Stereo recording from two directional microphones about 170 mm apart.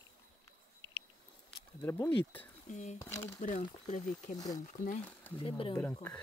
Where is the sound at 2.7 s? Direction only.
45° left (ahead or behind).